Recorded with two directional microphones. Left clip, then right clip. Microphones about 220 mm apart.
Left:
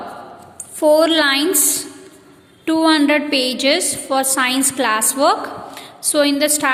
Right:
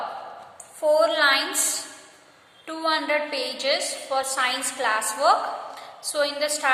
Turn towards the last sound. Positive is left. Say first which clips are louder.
# left 8 dB
turn(degrees=40)  # may be behind; listen again after turning